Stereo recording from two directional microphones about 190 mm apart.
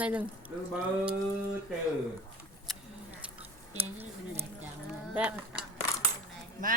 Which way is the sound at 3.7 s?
30° right (ahead or behind).